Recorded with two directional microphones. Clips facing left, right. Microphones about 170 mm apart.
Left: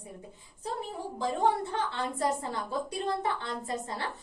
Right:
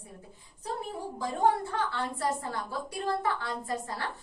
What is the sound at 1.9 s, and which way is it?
A woman's voice, 20° left (ahead or behind).